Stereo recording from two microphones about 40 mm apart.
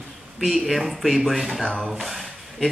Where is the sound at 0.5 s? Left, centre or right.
Centre.